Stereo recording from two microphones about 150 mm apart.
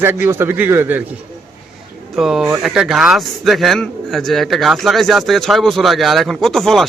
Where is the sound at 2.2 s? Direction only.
5° right (ahead or behind).